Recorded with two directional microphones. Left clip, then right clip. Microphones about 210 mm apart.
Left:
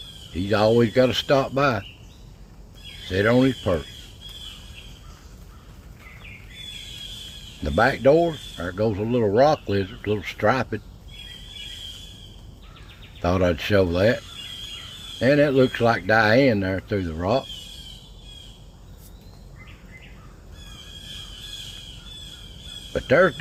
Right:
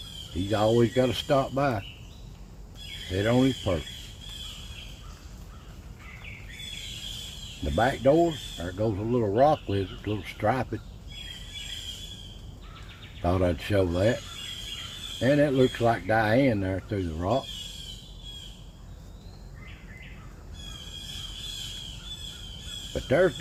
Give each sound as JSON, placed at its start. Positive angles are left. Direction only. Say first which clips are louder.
{"t": 0.5, "sound": "speech", "louder": "left 5 dB", "side_deg": 30}
{"t": 3.1, "sound": "speech", "louder": "left 6 dB", "side_deg": 30}
{"t": 7.8, "sound": "speech", "louder": "left 5 dB", "side_deg": 35}
{"t": 13.2, "sound": "speech", "louder": "left 5 dB", "side_deg": 30}
{"t": 15.2, "sound": "speech", "louder": "left 5 dB", "side_deg": 35}
{"t": 22.9, "sound": "speech", "louder": "left 6 dB", "side_deg": 35}